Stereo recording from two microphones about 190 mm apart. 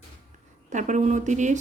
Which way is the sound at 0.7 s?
40° right (ahead or behind).